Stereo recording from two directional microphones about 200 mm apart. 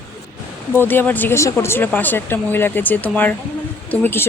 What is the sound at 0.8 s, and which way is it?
Speech, 10° left (ahead or behind).